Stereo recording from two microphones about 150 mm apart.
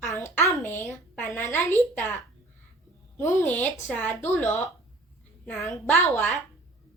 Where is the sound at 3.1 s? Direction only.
10° left (ahead or behind).